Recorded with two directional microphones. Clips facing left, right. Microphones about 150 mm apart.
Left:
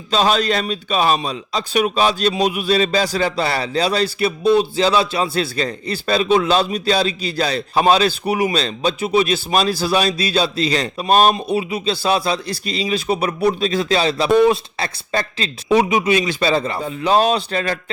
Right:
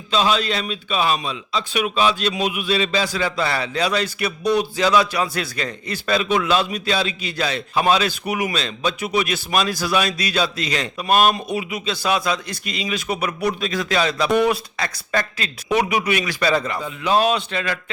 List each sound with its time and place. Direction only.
0.1 s a man's voice: 40° left (ahead or behind)